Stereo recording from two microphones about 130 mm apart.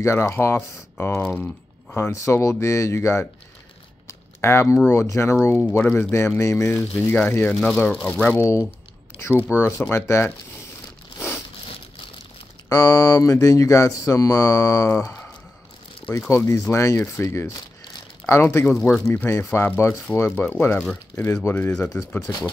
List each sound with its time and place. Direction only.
0.0 s speech: 20° left (ahead or behind)
2.0 s speech: 20° left (ahead or behind)
4.1 s a sound: 20° left (ahead or behind)
4.8 s speech: 20° left (ahead or behind)
7.5 s speech: 5° left (ahead or behind)
9.3 s speech: 15° right (ahead or behind)
9.8 s speech: 20° left (ahead or behind)
12.6 s speech: 25° left (ahead or behind)
16.1 s speech: 20° left (ahead or behind)
21.1 s speech: 20° left (ahead or behind)